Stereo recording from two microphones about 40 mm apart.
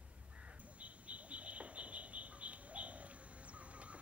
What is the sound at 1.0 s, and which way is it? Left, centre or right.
Bird, right.